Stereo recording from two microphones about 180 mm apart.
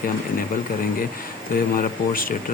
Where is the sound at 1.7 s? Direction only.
50° left (ahead or behind).